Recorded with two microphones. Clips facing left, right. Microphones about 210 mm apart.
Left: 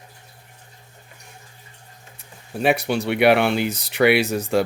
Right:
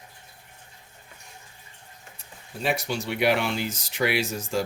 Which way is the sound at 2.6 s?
65° left (ahead or behind).